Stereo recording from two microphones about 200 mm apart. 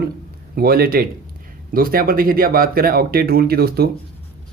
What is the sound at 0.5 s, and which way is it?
A man's voice, 50° right (ahead or behind).